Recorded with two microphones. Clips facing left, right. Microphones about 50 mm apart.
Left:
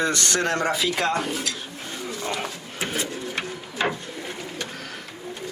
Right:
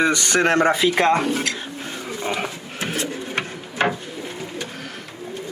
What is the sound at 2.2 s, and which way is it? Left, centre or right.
Speech, right.